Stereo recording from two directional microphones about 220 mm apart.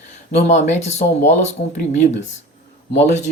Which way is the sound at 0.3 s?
30° left (ahead or behind).